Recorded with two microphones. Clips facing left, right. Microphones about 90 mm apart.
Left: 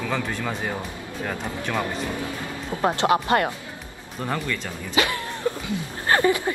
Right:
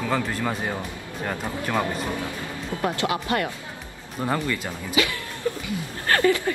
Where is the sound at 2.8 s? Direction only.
30° left (ahead or behind).